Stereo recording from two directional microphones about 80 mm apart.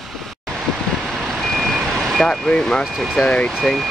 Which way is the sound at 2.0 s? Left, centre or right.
Centre.